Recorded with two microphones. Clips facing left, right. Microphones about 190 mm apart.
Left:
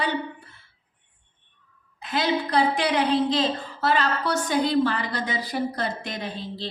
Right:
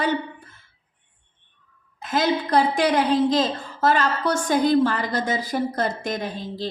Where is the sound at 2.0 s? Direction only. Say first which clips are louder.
Right 3 dB; 45° right (ahead or behind).